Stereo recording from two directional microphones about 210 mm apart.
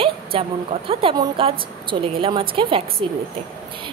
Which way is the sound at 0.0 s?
25° right (ahead or behind).